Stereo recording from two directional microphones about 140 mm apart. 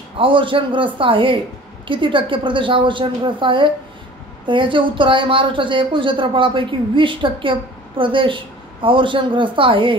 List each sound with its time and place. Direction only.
0.2 s speech: 35° right (ahead or behind)